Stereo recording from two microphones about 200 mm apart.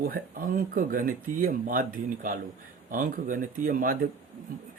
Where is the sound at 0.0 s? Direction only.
45° right (ahead or behind).